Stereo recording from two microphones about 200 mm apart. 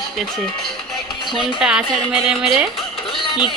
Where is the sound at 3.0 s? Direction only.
25° left (ahead or behind).